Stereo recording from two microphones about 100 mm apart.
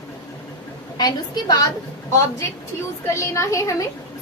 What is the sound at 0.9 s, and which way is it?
Speech, 40° left (ahead or behind).